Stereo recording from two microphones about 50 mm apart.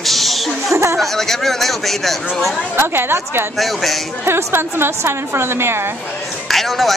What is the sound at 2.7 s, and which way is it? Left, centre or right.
Speech, right.